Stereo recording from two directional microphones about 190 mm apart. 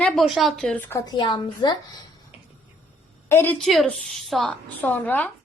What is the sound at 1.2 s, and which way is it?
Speech, 25° left (ahead or behind).